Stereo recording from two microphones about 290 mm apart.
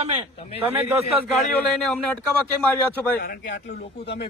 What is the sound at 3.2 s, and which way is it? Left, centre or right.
Speech, left.